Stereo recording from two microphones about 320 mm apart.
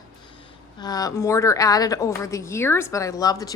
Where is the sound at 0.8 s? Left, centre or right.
Centre.